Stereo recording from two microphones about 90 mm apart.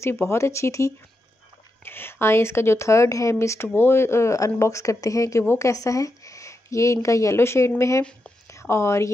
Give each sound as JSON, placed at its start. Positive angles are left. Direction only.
{"t": 0.0, "sound": "a woman's voice", "side_deg": 30}